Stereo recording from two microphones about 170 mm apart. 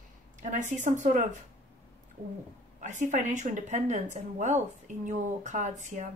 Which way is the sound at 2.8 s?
45° right (ahead or behind).